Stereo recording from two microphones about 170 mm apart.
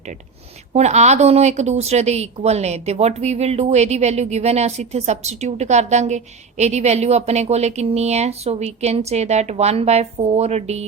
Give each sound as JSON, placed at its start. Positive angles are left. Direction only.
{"t": 0.7, "sound": "a woman's voice", "side_deg": -40}